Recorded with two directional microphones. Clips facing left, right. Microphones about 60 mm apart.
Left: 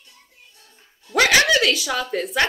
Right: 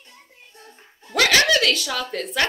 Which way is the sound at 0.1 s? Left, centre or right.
Right.